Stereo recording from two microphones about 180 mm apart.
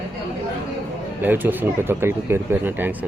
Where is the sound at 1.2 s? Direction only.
10° right (ahead or behind).